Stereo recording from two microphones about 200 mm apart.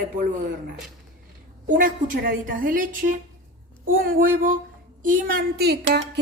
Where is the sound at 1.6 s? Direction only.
45° right (ahead or behind).